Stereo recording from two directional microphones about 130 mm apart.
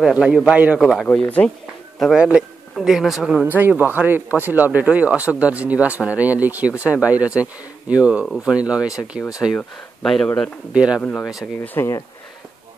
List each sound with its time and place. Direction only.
0.0 s a man's voice: 5° right (ahead or behind)
1.0 s speech: 5° left (ahead or behind)
9.6 s a man's voice: 5° left (ahead or behind)
10.7 s speech: 10° right (ahead or behind)
11.0 s speech: 10° left (ahead or behind)